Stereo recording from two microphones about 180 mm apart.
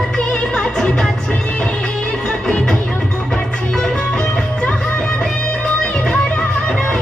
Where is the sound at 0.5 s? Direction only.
5° left (ahead or behind).